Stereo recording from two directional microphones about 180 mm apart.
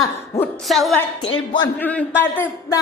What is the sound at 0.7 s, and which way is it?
Music, centre (ahead or behind).